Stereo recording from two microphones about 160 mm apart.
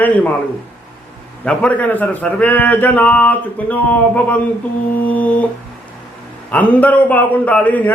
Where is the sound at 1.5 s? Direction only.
10° left (ahead or behind).